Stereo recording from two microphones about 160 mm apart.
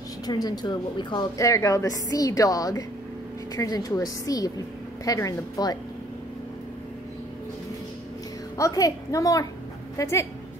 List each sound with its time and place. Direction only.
0.3 s a woman's voice: 25° left (ahead or behind)
8.5 s a woman's voice: 20° left (ahead or behind)